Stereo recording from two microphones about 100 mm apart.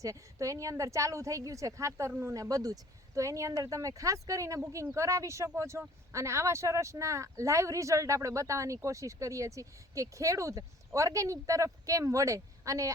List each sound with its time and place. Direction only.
0.0 s speech: 35° right (ahead or behind)